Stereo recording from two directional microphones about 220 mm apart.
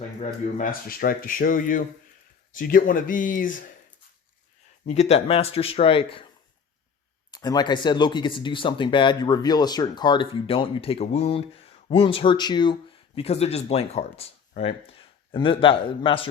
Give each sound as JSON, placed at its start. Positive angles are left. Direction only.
{"t": 0.5, "sound": "speech", "side_deg": 40}
{"t": 4.9, "sound": "speech", "side_deg": 30}
{"t": 7.3, "sound": "speech", "side_deg": 20}